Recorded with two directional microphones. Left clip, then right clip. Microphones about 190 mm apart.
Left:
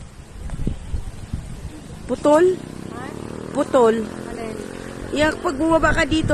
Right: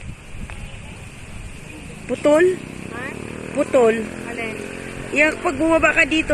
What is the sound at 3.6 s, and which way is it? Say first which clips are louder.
Speech: even; 25° left (ahead or behind).